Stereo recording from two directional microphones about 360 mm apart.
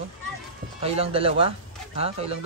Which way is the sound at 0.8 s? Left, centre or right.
Centre.